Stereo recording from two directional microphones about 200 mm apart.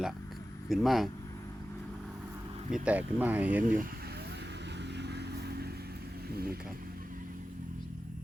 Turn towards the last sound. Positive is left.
turn(degrees=-50)  # may be behind; listen again after turning